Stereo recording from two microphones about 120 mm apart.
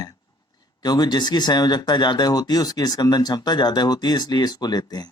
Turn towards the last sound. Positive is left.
turn(degrees=35)  # may be behind; listen again after turning